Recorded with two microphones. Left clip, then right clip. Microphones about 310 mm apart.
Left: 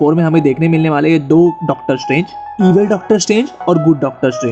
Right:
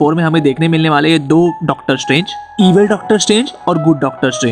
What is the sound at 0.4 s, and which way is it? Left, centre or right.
Speech, right.